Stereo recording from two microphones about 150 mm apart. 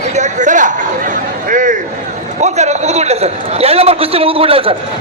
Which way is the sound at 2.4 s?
50° right (ahead or behind).